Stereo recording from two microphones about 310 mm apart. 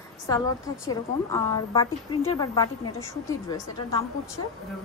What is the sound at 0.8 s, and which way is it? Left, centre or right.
A woman's voice, centre.